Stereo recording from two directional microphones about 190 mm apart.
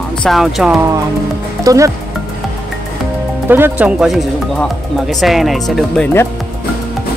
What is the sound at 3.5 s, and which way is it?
Speech, 10° right (ahead or behind).